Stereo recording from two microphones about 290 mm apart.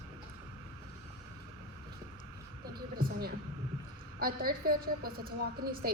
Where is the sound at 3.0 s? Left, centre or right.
Right.